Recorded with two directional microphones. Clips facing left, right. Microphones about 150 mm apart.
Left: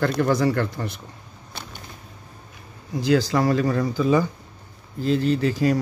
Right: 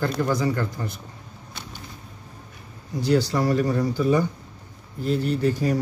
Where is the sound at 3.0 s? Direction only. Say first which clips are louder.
Left 2 dB; 90° left.